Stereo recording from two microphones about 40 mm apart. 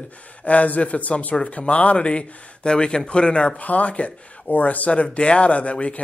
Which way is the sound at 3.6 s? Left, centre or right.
Left.